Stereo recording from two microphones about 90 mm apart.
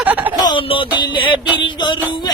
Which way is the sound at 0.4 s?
80° left.